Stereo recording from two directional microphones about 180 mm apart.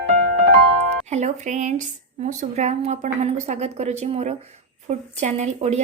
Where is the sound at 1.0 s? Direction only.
40° right (ahead or behind).